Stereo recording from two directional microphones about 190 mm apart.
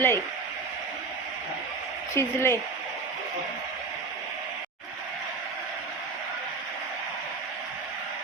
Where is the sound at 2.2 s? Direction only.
15° left (ahead or behind).